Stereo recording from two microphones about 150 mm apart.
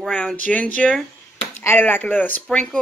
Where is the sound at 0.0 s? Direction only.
5° left (ahead or behind).